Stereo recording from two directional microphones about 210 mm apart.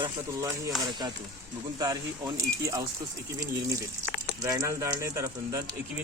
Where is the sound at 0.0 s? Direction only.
15° right (ahead or behind).